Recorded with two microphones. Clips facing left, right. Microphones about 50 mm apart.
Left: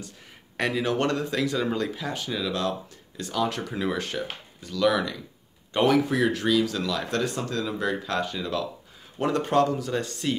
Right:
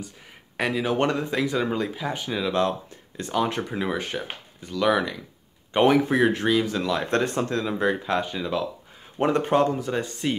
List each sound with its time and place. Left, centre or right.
0.6 s speech: centre
0.9 s speech: centre